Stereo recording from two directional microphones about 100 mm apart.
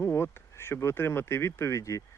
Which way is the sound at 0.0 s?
25° left (ahead or behind).